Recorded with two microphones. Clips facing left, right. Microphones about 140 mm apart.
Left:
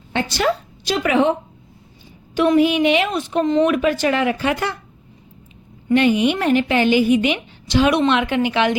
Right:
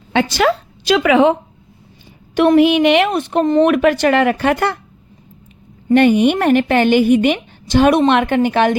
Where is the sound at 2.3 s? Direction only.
65° right (ahead or behind).